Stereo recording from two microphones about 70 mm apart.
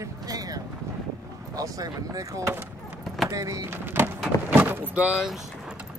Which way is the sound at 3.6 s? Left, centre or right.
Right.